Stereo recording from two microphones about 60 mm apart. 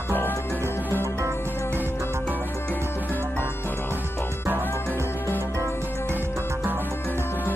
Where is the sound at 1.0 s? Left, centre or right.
Right.